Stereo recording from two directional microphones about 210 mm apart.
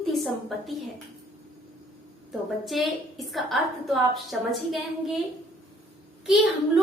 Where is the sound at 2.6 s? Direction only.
Centre (ahead or behind).